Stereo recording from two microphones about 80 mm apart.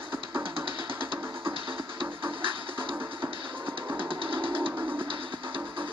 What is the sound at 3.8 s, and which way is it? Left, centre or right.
Music, right.